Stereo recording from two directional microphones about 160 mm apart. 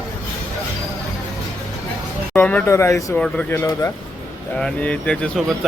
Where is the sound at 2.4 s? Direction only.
10° left (ahead or behind).